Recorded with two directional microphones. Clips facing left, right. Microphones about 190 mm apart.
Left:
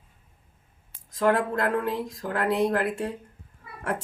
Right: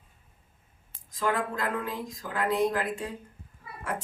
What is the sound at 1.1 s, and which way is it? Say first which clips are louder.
Speech: left 6 dB; 60° left (ahead or behind).